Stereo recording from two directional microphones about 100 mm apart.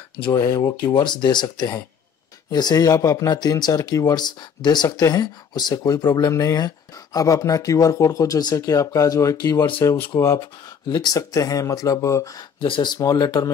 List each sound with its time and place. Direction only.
0.2 s speech: 40° left (ahead or behind)
3.3 s speech: 45° left (ahead or behind)
10.9 s speech: 45° left (ahead or behind)
12.6 s speech: 55° left (ahead or behind)
13.0 s speech: 35° left (ahead or behind)